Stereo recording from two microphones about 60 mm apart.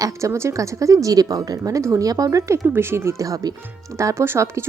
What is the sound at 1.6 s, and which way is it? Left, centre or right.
Speech, right.